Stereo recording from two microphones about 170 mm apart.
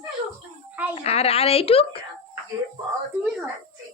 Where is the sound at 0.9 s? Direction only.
35° left (ahead or behind).